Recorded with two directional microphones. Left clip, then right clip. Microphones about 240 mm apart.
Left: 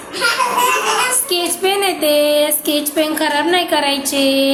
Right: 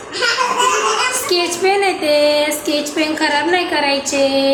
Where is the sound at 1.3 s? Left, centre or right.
Centre.